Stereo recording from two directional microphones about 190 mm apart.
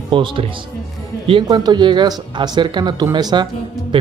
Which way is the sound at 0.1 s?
25° right (ahead or behind).